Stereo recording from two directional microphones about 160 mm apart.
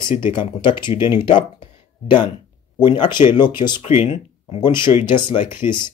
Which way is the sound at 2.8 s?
30° left (ahead or behind).